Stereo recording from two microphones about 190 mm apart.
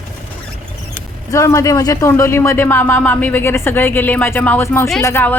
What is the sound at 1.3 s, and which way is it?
Speech, 15° left (ahead or behind).